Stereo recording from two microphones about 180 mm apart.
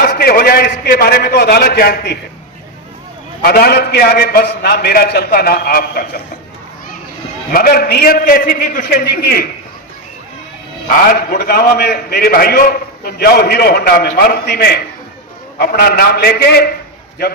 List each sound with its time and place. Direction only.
0.0 s a sound: 60° left (ahead or behind)
3.4 s a man's voice: 60° left (ahead or behind)
7.5 s a man's voice: 55° left (ahead or behind)
11.1 s a man's voice: 55° left (ahead or behind)